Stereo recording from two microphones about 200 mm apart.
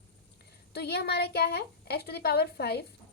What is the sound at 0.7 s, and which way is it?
A woman's voice, 55° left (ahead or behind).